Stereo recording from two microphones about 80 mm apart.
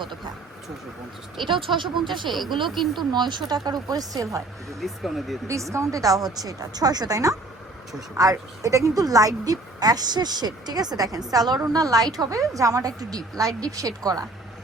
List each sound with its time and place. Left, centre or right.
1.4 s speech: right
2.6 s speech: centre
3.1 s speech: right
4.8 s speech: centre
5.7 s a woman's voice: right